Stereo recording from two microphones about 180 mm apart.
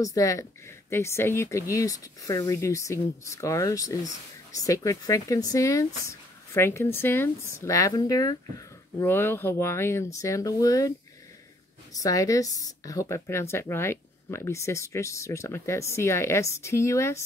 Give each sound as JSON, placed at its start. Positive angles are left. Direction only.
{"t": 0.0, "sound": "speech", "side_deg": 20}
{"t": 11.9, "sound": "speech", "side_deg": 20}